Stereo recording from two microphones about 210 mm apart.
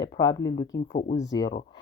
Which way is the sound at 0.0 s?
20° left (ahead or behind).